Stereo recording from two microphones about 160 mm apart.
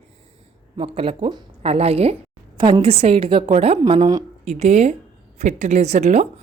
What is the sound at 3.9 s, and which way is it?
Speech, 25° right (ahead or behind).